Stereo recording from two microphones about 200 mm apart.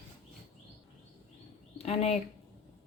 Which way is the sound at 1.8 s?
30° left (ahead or behind).